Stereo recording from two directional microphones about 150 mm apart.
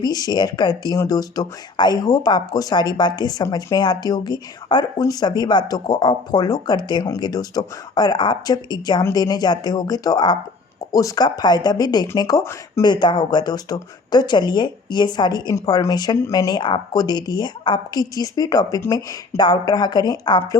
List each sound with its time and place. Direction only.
0.0 s speech: 25° left (ahead or behind)